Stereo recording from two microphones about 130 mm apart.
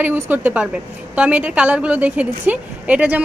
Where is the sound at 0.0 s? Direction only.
15° right (ahead or behind).